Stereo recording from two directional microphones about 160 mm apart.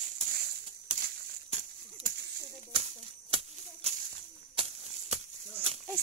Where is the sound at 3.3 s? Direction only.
40° right (ahead or behind).